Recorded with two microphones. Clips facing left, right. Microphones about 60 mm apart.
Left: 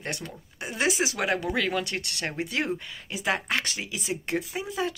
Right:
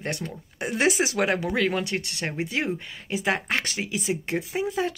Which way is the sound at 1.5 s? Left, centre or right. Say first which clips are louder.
Right 3 dB; right.